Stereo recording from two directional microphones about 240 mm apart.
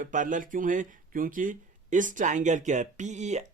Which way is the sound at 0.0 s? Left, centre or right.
Right.